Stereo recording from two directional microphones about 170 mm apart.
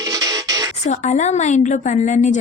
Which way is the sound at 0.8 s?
45° left (ahead or behind).